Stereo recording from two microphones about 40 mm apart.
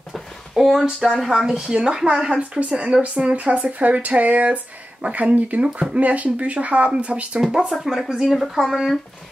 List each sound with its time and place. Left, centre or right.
0.6 s a woman's voice: centre; by 5.6 s right
5.6 s a woman's voice: right
5.9 s speech: right
7.3 s speech: centre